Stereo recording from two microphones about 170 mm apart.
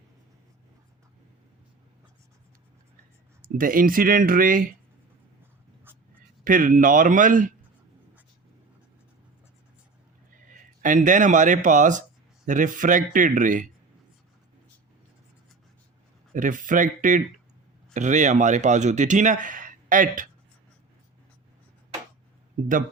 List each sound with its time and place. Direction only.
3.4 s speech: 55° right (ahead or behind)
6.4 s speech: 50° right (ahead or behind)
10.3 s speech: 50° right (ahead or behind)
16.3 s speech: 50° right (ahead or behind)